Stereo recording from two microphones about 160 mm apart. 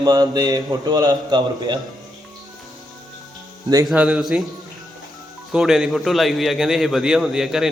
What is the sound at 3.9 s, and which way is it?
Speech, 5° right (ahead or behind).